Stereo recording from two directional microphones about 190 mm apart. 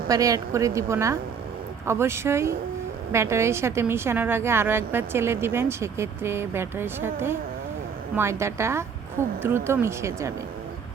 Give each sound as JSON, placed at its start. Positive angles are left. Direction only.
{"t": 0.1, "sound": "a woman's voice", "side_deg": -20}